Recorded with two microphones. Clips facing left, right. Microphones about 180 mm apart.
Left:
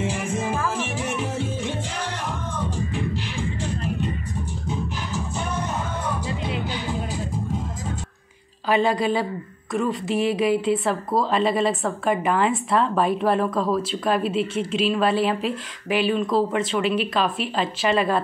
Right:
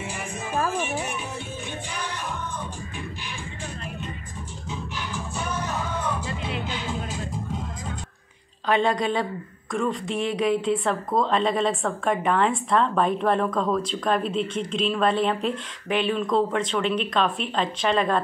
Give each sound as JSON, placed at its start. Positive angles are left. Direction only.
{"t": 0.0, "sound": "music", "side_deg": 90}
{"t": 6.0, "sound": "music", "side_deg": 10}
{"t": 8.6, "sound": "a woman's voice", "side_deg": 5}